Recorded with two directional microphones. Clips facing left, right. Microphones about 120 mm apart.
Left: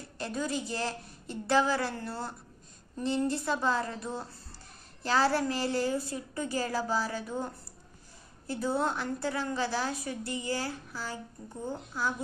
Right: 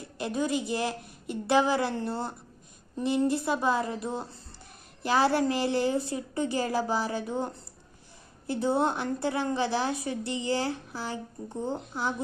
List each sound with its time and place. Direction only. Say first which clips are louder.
0.2 s a woman's voice: right 4 dB; 15° right (ahead or behind)